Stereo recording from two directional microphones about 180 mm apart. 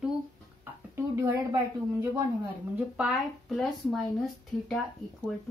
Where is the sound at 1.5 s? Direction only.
20° right (ahead or behind).